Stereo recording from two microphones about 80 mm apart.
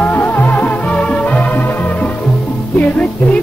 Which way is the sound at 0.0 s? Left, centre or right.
Left.